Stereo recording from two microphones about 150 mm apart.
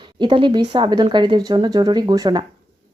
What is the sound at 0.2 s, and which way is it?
Speech, 35° right (ahead or behind).